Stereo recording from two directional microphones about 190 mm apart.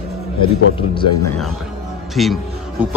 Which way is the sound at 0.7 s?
25° left (ahead or behind).